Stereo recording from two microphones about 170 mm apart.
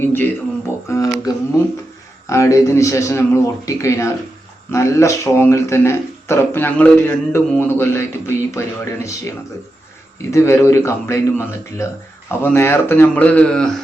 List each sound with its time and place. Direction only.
0.0 s speech: 10° left (ahead or behind)
0.9 s a sound: 20° left (ahead or behind)
2.2 s speech: 15° left (ahead or behind)